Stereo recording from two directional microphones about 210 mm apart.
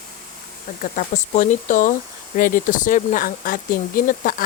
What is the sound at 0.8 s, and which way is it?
Speech, 35° left (ahead or behind).